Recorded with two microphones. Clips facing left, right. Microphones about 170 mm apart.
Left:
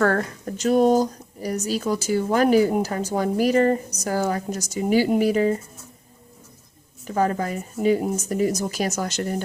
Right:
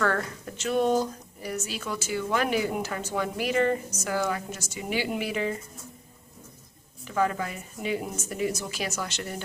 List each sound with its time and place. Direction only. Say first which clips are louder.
0.0 s speech: left 6 dB; 45° left (ahead or behind)
7.0 s speech: left 4 dB; 40° left (ahead or behind)